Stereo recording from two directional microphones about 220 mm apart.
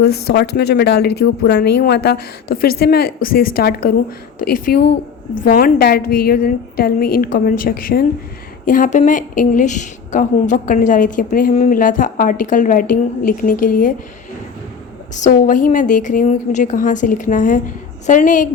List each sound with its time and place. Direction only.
0.0 s a woman's voice: 45° left (ahead or behind)
15.1 s a woman's voice: 35° left (ahead or behind)